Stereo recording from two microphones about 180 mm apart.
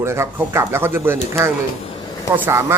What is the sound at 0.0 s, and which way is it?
Speech, 15° right (ahead or behind).